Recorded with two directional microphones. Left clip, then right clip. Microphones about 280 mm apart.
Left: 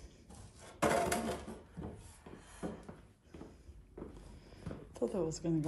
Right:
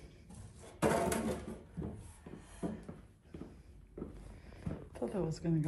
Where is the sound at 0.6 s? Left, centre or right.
Centre.